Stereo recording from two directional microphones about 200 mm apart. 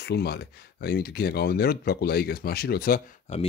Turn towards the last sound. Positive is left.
turn(degrees=35)  # may be behind; listen again after turning